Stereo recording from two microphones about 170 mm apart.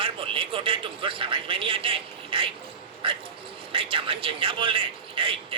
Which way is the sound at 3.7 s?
30° right (ahead or behind).